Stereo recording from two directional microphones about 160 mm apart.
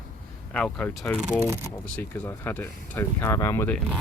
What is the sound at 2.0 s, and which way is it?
Speech, 10° left (ahead or behind).